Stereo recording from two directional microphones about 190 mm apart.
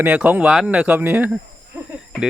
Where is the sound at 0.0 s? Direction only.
5° right (ahead or behind).